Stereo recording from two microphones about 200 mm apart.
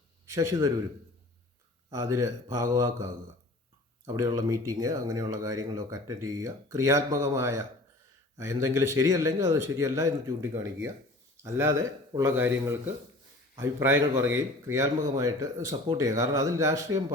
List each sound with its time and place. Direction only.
0.3 s a man's voice: 15° right (ahead or behind)
1.9 s speech: 15° right (ahead or behind)